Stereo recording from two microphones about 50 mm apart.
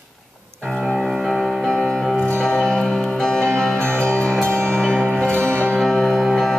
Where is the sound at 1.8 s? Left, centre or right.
Centre.